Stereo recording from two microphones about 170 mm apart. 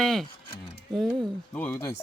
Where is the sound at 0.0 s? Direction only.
Centre (ahead or behind).